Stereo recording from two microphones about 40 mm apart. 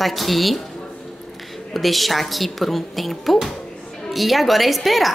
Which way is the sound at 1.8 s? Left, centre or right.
Centre.